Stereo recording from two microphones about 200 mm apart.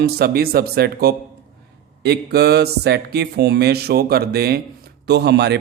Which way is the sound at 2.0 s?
55° right (ahead or behind).